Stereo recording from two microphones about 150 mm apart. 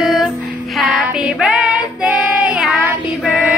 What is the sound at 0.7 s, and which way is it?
Female singing, 5° right (ahead or behind).